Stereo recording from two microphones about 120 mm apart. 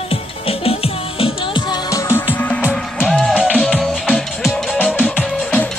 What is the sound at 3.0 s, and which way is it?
Music, centre (ahead or behind).